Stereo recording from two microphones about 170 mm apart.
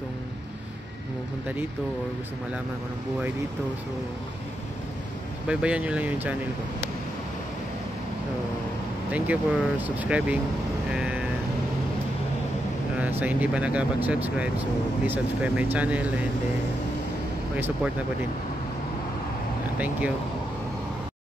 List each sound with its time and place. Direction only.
5.5 s speech: 5° right (ahead or behind)
9.1 s speech: 10° right (ahead or behind)
10.9 s a sound: 5° right (ahead or behind)
13.2 s speech: 10° right (ahead or behind)